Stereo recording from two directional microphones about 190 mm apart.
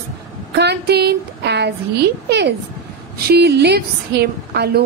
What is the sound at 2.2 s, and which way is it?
A woman's voice, 60° right (ahead or behind).